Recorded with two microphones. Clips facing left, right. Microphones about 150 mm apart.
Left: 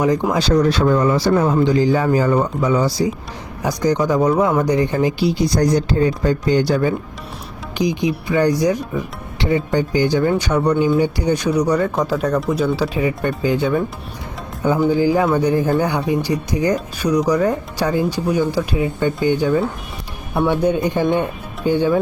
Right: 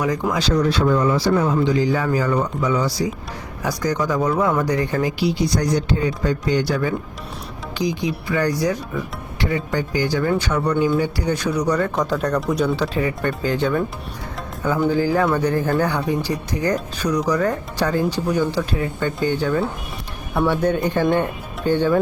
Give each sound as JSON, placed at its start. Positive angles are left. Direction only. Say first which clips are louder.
{"t": 0.0, "sound": "speech", "louder": "left 4 dB", "side_deg": 25}
{"t": 0.4, "sound": "speech", "louder": "left 2 dB", "side_deg": 45}
{"t": 5.3, "sound": "speech", "louder": "left 4 dB", "side_deg": 40}
{"t": 14.8, "sound": "speech", "louder": "left 2 dB", "side_deg": 15}
{"t": 20.6, "sound": "speech", "louder": "left 2 dB", "side_deg": 15}